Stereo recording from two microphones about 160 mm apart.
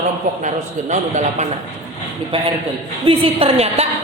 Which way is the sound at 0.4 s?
45° right (ahead or behind).